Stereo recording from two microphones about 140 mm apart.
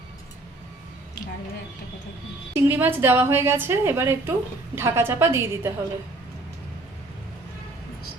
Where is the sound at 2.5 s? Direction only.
15° right (ahead or behind).